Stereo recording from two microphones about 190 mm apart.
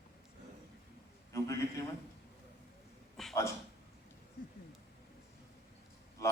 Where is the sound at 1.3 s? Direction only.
15° left (ahead or behind).